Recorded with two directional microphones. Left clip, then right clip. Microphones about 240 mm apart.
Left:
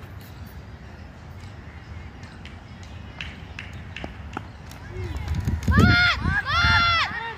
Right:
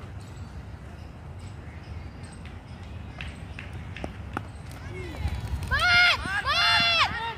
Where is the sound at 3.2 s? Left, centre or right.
Left.